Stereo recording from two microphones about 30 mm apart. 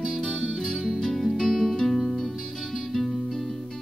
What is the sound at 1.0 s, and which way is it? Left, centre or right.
Music, centre.